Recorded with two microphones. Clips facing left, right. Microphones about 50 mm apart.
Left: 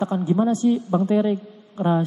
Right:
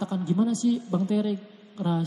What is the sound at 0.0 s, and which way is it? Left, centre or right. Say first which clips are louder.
A man's voice: left 5 dB; left.